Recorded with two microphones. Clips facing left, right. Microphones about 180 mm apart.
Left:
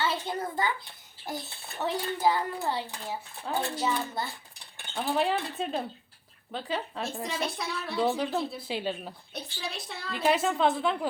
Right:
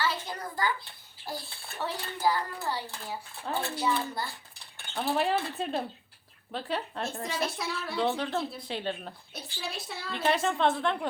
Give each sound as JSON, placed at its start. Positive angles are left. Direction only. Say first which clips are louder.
{"t": 0.0, "sound": "a child's voice", "louder": "left 2 dB", "side_deg": 25}
{"t": 4.9, "sound": "a woman's voice", "louder": "even", "side_deg": 0}